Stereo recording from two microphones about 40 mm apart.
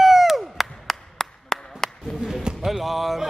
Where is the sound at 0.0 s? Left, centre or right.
Centre.